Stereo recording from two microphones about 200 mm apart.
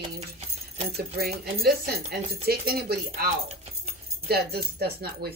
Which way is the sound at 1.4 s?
50° right (ahead or behind).